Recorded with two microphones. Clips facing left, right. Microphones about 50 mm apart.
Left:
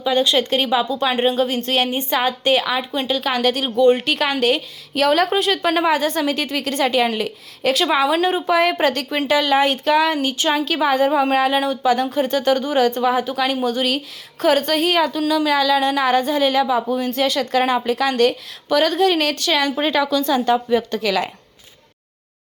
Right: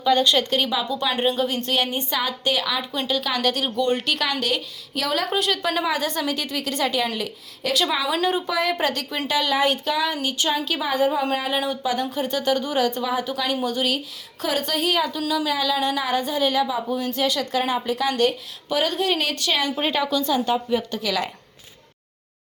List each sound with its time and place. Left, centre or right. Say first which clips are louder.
0.0 s a woman's voice: left 1 dB; left
3.8 s speech: left 11 dB; left
4.0 s a woman's voice: left 6 dB; left
5.3 s a woman's voice: left 5 dB; left
8.4 s a woman's voice: left 6 dB; left
18.2 s speech: left 4 dB; left